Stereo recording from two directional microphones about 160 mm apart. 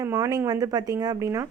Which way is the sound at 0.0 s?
20° right (ahead or behind).